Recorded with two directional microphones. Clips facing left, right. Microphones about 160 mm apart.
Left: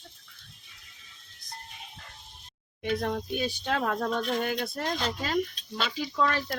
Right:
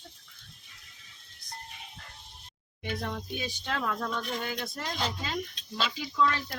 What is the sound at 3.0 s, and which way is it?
Speech, 50° left (ahead or behind).